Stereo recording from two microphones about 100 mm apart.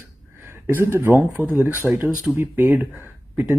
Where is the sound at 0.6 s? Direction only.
20° right (ahead or behind).